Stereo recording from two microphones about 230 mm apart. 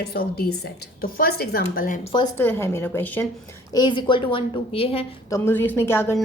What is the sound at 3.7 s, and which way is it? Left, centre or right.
A woman's voice, centre.